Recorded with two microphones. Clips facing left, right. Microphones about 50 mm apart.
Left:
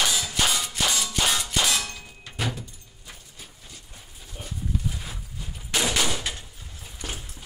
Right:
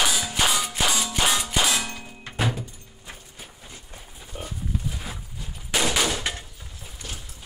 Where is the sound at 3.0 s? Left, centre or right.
Right.